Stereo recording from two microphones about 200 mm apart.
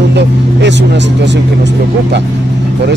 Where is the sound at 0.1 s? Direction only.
60° right (ahead or behind).